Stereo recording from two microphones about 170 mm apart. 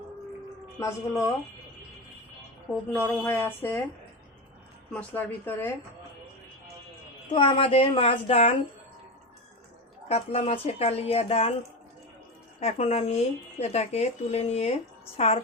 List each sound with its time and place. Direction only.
0.8 s speech: 15° left (ahead or behind)
2.9 s speech: 15° left (ahead or behind)
4.9 s speech: 10° left (ahead or behind)
7.3 s speech: 30° left (ahead or behind)
10.1 s speech: 35° left (ahead or behind)
12.5 s speech: 40° left (ahead or behind)